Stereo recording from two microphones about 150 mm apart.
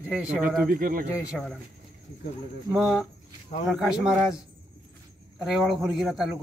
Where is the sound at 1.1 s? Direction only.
5° right (ahead or behind).